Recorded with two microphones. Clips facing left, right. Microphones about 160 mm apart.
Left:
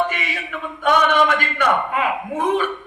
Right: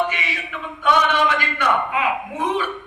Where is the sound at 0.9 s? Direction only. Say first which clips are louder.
Left 2 dB; 50° left (ahead or behind).